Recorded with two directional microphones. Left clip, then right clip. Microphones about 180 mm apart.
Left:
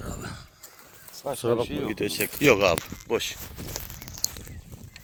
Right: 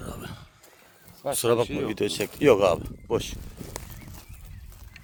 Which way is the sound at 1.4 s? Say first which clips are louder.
Right 3 dB; 65° right (ahead or behind).